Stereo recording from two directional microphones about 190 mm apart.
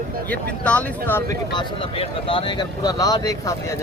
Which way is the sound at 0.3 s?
5° left (ahead or behind).